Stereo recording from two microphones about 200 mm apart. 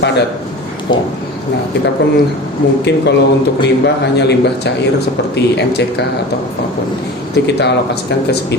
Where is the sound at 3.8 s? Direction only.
55° left (ahead or behind).